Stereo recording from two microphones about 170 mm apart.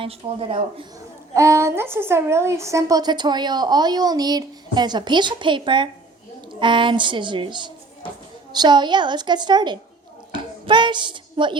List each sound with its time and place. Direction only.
0.0 s speech: 35° right (ahead or behind)
1.3 s a woman's voice: 20° right (ahead or behind)
10.3 s a sound: 30° right (ahead or behind)